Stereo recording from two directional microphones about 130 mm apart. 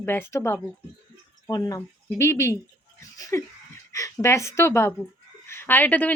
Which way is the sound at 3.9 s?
25° left (ahead or behind).